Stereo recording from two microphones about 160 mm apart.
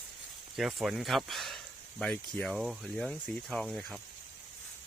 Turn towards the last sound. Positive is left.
turn(degrees=0)  # may be behind; listen again after turning